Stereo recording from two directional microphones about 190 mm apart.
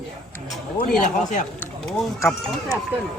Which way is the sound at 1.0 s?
40° left (ahead or behind).